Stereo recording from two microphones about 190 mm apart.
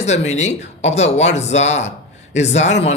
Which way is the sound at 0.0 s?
35° left (ahead or behind).